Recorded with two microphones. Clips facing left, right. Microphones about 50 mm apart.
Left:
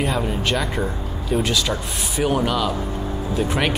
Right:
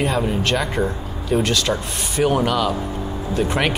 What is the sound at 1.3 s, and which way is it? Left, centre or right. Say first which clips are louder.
Speech: right 2 dB; centre.